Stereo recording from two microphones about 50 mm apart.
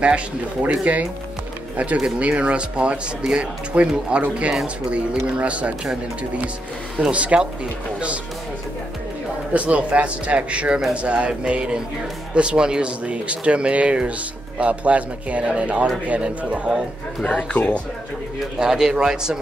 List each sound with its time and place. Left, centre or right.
0.0 s speech: right
2.1 s speech: right
7.1 s speech: right
9.5 s speech: right
17.3 s speech: left
18.6 s speech: centre